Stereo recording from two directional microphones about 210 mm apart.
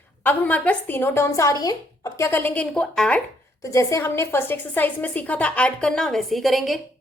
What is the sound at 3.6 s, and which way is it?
A woman's voice, 15° left (ahead or behind).